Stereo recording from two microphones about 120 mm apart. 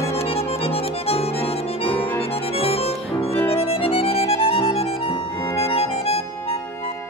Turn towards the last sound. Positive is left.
turn(degrees=50)  # may be behind; listen again after turning